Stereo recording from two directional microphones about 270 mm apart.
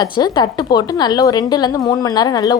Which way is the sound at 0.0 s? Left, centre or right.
Centre.